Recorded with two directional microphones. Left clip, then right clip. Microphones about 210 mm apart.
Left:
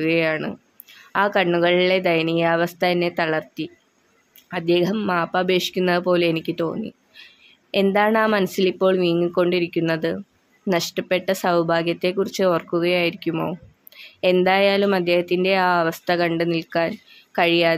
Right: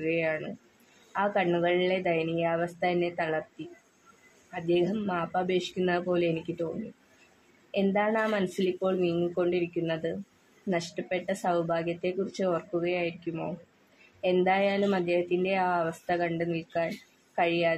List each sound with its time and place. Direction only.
0.0 s speech: 35° left (ahead or behind)
4.5 s speech: 30° left (ahead or behind)
7.7 s speech: 35° left (ahead or behind)